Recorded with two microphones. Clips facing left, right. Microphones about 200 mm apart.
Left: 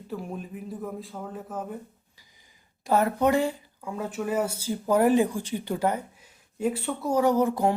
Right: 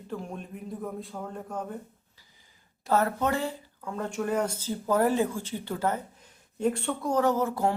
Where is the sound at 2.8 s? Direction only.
15° left (ahead or behind).